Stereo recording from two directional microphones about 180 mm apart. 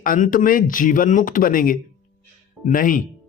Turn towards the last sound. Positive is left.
turn(degrees=50)  # may be behind; listen again after turning